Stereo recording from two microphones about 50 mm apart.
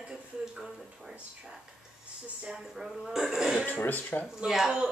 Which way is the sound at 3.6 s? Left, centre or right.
Left.